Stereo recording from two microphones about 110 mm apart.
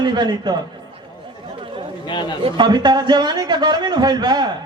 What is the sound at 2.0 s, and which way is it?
Speech, 45° left (ahead or behind).